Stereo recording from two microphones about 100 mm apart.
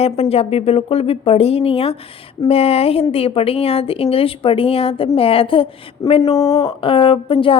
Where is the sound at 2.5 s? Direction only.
90° left.